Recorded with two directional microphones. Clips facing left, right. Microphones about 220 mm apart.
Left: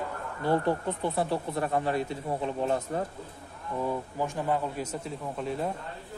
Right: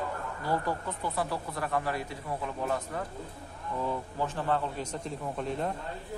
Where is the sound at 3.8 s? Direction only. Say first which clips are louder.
Left 2 dB; 10° left (ahead or behind).